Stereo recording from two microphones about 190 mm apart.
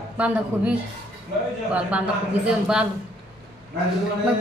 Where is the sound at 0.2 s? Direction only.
5° right (ahead or behind).